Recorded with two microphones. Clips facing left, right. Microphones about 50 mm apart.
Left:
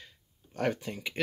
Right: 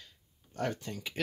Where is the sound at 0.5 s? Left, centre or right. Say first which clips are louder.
Left 4 dB; left.